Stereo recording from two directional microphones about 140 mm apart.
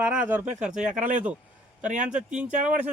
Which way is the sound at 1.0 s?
60° right (ahead or behind).